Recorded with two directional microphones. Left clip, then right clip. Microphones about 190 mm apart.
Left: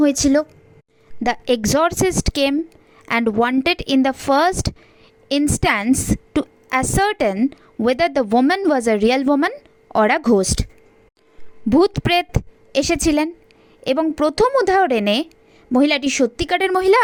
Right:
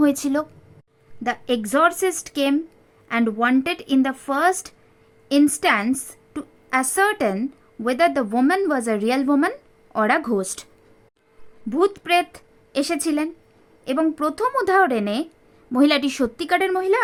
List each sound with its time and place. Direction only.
0.0 s a woman's voice: 25° left (ahead or behind)
1.2 s a woman's voice: 35° left (ahead or behind)
7.3 s a woman's voice: 20° left (ahead or behind)
7.9 s a woman's voice: 35° left (ahead or behind)
11.7 s a woman's voice: 35° left (ahead or behind)
15.7 s a woman's voice: 25° left (ahead or behind); by 17.0 s 50° left (ahead or behind)